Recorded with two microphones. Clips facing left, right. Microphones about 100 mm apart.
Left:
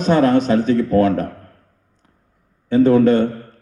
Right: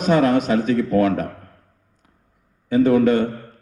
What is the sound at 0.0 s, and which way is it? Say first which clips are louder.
A man's voice: left 2 dB; 35° left (ahead or behind).